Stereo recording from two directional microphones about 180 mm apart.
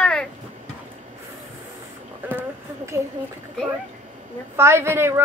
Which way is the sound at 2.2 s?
10° right (ahead or behind).